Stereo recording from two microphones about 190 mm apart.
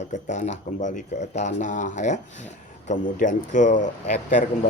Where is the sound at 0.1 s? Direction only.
40° left (ahead or behind).